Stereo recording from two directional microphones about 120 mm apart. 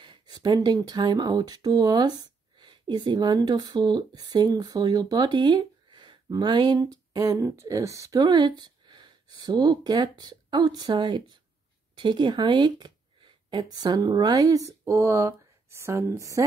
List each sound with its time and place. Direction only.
0.0 s speech: 40° right (ahead or behind)